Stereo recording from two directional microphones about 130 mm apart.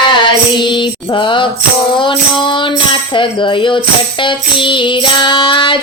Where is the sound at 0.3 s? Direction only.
35° left (ahead or behind).